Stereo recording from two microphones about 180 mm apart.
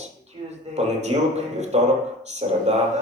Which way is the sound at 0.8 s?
40° right (ahead or behind).